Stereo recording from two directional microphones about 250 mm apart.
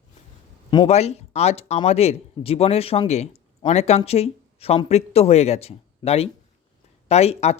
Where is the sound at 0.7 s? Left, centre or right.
Left.